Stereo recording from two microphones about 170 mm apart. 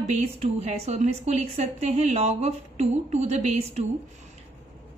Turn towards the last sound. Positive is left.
turn(degrees=-40)  # may be behind; listen again after turning